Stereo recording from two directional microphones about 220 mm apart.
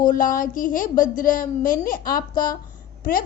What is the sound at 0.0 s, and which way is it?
A woman's voice, 40° left (ahead or behind).